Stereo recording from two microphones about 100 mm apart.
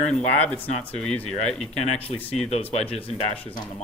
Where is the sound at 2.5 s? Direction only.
90° left.